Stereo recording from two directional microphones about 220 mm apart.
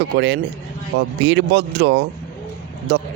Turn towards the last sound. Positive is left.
turn(degrees=-50)  # may be behind; listen again after turning